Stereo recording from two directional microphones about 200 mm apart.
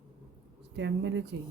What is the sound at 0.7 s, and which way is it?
Speech, 60° right (ahead or behind).